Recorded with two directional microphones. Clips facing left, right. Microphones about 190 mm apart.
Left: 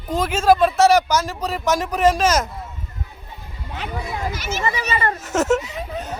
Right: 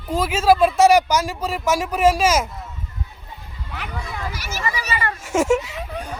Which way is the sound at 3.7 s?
20° left (ahead or behind).